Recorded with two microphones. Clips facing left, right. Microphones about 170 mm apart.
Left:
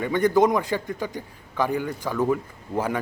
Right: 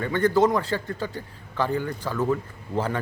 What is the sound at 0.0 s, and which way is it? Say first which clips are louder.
A man's voice: left 1 dB; 15° left (ahead or behind).